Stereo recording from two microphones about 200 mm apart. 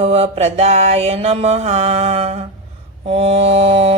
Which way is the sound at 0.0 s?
30° right (ahead or behind).